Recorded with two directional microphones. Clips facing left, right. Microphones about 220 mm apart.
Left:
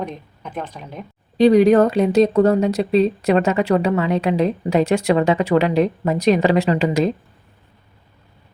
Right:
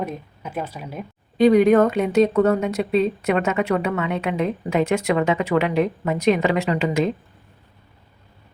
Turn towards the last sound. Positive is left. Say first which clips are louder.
# left 3 dB
turn(degrees=35)  # may be behind; listen again after turning